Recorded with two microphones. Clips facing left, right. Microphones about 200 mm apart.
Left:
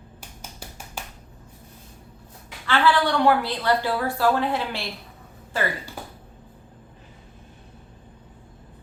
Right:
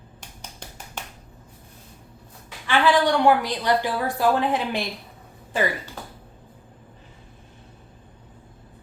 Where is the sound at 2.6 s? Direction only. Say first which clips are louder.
Right 2 dB; 15° right (ahead or behind).